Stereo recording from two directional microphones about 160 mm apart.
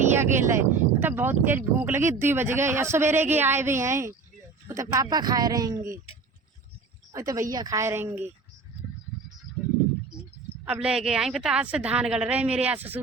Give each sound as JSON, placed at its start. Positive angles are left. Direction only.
{"t": 0.1, "sound": "speech", "side_deg": -15}
{"t": 7.1, "sound": "speech", "side_deg": -20}
{"t": 10.7, "sound": "a woman's voice", "side_deg": -5}